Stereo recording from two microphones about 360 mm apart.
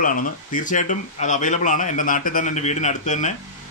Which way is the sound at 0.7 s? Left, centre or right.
Left.